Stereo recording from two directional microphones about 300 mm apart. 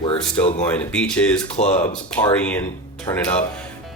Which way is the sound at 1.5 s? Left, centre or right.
Left.